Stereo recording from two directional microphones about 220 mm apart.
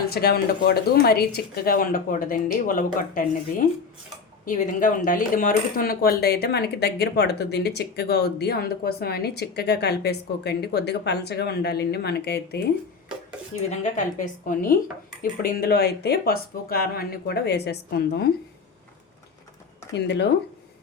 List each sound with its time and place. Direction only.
0.1 s speech: 45° left (ahead or behind)
4.4 s speech: 35° left (ahead or behind)
13.7 s speech: 35° left (ahead or behind)
20.1 s speech: 50° left (ahead or behind)